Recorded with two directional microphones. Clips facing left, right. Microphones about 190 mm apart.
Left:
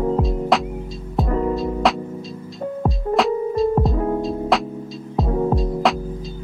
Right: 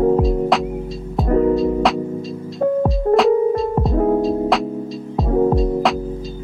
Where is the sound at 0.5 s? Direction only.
Centre (ahead or behind).